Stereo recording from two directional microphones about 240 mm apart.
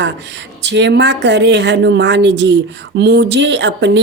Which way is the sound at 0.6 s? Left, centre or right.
Right.